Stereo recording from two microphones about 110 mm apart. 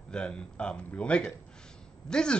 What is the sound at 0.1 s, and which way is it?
Speech, 10° left (ahead or behind).